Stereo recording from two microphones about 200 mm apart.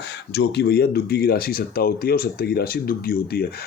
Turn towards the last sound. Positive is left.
turn(degrees=50)  # may be behind; listen again after turning